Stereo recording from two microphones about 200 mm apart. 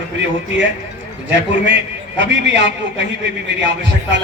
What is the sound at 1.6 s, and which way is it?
A man's voice, 65° right (ahead or behind).